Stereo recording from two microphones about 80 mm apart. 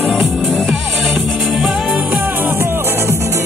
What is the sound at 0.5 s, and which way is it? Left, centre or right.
Music, centre.